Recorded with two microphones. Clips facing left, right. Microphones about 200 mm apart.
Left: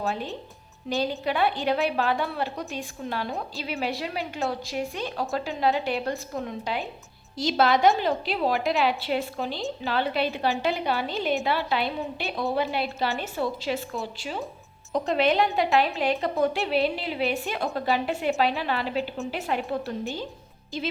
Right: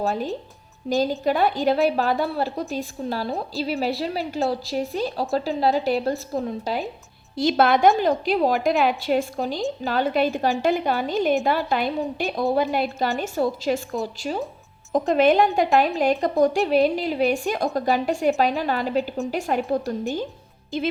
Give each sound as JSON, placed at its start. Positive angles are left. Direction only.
{"t": 0.0, "sound": "a woman's voice", "side_deg": -35}
{"t": 7.3, "sound": "a woman's voice", "side_deg": -55}
{"t": 20.7, "sound": "speech", "side_deg": -55}